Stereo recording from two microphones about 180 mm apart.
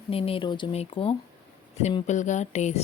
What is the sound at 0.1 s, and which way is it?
Speech, 30° left (ahead or behind).